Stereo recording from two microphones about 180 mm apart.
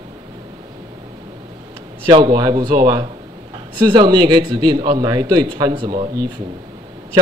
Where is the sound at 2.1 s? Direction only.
25° right (ahead or behind).